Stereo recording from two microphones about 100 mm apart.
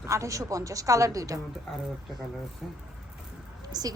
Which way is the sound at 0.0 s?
30° right (ahead or behind).